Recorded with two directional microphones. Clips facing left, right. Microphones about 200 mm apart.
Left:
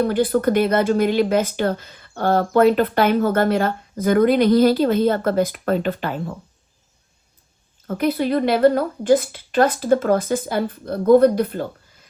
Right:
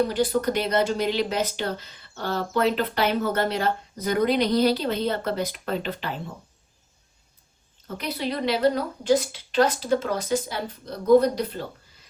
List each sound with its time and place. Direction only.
0.0 s speech: 55° left (ahead or behind)
7.9 s speech: 50° left (ahead or behind)